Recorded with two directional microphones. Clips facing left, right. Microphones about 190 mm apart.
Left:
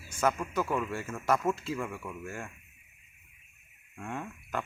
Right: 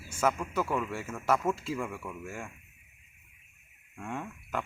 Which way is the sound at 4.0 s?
Centre (ahead or behind).